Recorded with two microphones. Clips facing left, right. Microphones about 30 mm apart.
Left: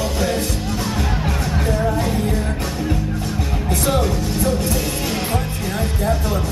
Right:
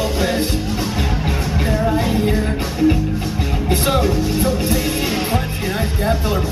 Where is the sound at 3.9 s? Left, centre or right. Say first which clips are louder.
Right 3 dB; centre.